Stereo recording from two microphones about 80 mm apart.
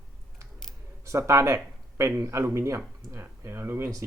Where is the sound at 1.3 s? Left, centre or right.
Right.